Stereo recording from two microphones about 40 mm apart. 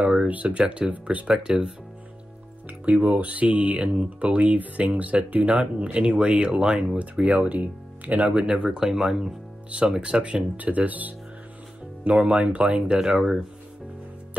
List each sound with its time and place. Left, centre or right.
0.0 s a sound: right
0.3 s speech: right
1.3 s speech: centre
2.8 s speech: right
10.6 s speech: right
12.1 s speech: right
13.0 s speech: centre